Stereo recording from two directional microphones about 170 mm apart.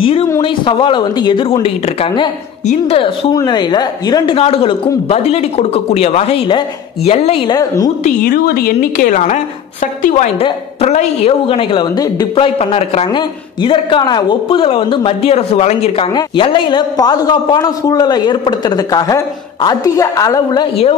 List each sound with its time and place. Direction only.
0.4 s speech: 30° left (ahead or behind)
7.5 s a man's voice: 20° left (ahead or behind)
8.0 s a woman's voice: 60° left (ahead or behind); by 12.4 s 25° left (ahead or behind)
12.5 s speech: 35° left (ahead or behind)
13.0 s a man's voice: 25° left (ahead or behind)